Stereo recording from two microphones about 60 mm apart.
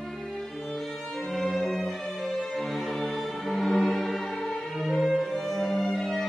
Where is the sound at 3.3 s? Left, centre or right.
Centre.